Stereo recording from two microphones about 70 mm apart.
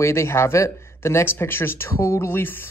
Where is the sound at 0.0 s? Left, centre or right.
Left.